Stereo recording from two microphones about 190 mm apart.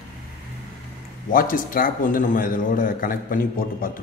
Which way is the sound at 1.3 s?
50° left (ahead or behind).